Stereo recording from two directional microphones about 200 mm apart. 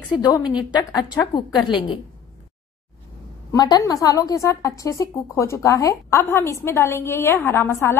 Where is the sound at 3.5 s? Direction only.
20° left (ahead or behind).